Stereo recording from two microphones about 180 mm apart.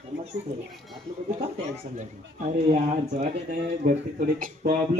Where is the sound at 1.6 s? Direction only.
40° right (ahead or behind).